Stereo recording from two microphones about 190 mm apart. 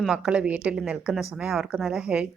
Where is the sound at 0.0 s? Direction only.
5° right (ahead or behind).